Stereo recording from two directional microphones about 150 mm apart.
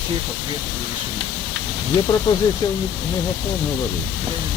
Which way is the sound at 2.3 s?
30° left (ahead or behind).